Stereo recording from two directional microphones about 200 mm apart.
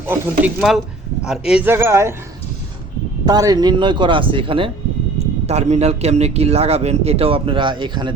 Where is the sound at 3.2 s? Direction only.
20° right (ahead or behind).